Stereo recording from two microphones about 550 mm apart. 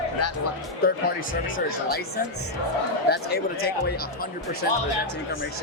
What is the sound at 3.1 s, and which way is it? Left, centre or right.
Speech, centre.